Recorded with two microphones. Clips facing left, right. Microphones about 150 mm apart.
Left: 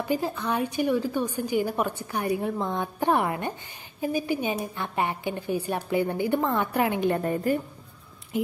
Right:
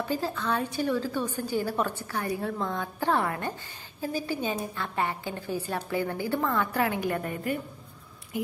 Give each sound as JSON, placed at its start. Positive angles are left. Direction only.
{"t": 0.1, "sound": "a woman's voice", "side_deg": 15}